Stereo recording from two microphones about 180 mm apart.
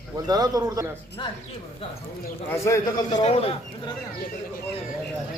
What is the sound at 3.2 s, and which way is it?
Speech, 35° left (ahead or behind).